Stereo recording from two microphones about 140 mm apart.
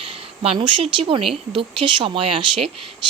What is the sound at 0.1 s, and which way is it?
Speech, 40° right (ahead or behind).